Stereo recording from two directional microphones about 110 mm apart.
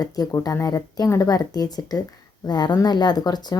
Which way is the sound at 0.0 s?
30° left (ahead or behind).